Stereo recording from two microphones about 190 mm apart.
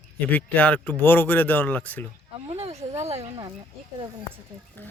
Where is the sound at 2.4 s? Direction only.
35° right (ahead or behind).